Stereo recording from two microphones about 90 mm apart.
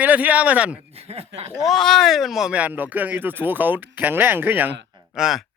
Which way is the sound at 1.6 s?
Centre (ahead or behind).